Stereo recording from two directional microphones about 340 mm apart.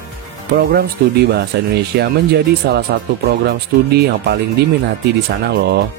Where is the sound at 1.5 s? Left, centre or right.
Right.